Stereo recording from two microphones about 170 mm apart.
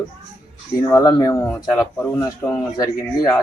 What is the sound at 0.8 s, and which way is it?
Speech, 20° left (ahead or behind).